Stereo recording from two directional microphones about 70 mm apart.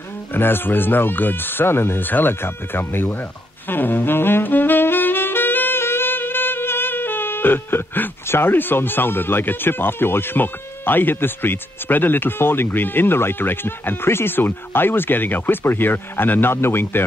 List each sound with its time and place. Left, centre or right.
0.3 s speech: left